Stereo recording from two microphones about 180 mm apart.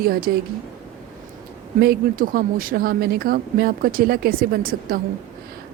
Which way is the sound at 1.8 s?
55° right (ahead or behind).